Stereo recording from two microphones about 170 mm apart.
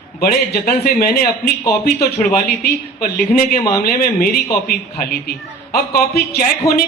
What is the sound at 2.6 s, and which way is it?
A woman's voice, 60° left (ahead or behind).